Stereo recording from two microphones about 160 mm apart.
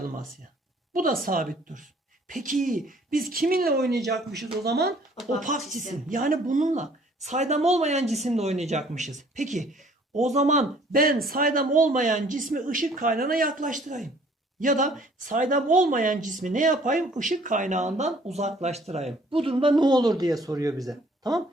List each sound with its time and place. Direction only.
0.9 s speech: 60° right (ahead or behind); by 3.9 s 80° right
4.6 s speech: 90° right
6.1 s speech: 60° right (ahead or behind); by 20.9 s 20° right (ahead or behind)